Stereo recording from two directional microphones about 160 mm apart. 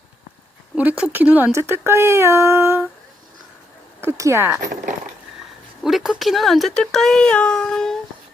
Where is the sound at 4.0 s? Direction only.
15° right (ahead or behind).